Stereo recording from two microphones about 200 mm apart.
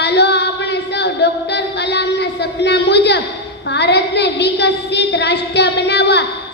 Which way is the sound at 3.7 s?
55° left (ahead or behind).